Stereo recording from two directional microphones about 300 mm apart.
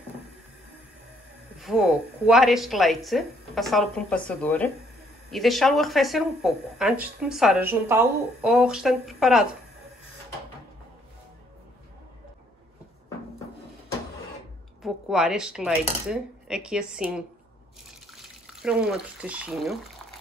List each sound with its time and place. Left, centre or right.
1.6 s speech: centre
14.8 s speech: centre